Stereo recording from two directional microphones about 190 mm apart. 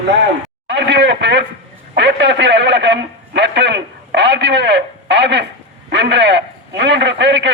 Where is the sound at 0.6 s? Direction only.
65° right (ahead or behind).